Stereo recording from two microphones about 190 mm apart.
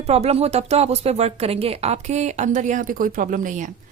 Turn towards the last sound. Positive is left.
turn(degrees=-40)  # may be behind; listen again after turning